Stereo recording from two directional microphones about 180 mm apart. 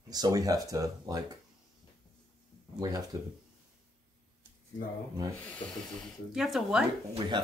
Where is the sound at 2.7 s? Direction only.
20° right (ahead or behind).